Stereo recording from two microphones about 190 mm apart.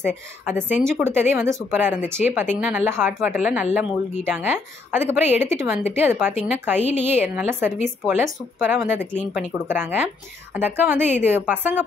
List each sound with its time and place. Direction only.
0.0 s a woman's voice: 10° right (ahead or behind)
6.8 s a woman's voice: 35° left (ahead or behind)
7.1 s a woman's voice: 10° right (ahead or behind)